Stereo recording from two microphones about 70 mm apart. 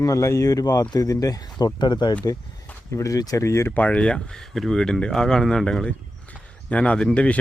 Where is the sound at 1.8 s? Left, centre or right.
Left.